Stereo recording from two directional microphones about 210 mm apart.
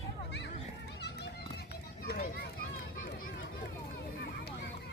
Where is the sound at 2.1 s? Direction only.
50° left (ahead or behind).